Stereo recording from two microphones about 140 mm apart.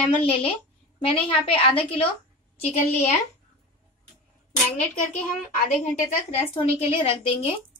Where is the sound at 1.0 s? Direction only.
40° left (ahead or behind).